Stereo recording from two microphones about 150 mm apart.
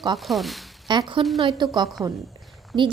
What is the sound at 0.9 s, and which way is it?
A woman's voice, 30° right (ahead or behind).